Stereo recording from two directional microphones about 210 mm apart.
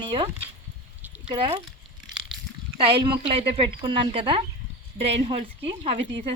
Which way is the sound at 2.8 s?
25° right (ahead or behind).